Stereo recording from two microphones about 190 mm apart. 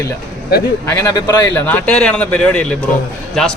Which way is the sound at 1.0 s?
20° left (ahead or behind).